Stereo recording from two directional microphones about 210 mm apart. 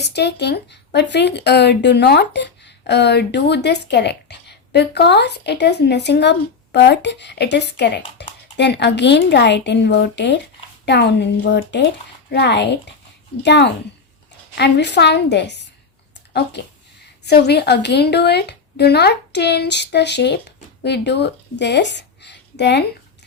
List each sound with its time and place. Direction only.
0.0 s a woman's voice: 50° left (ahead or behind)